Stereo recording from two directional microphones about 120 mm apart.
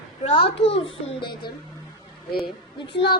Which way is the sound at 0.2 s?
55° left (ahead or behind).